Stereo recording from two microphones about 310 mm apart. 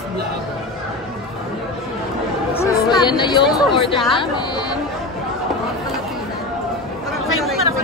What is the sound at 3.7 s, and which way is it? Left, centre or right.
Speech, centre.